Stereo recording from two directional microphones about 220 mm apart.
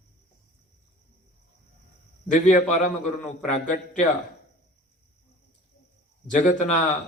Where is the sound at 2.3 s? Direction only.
35° left (ahead or behind).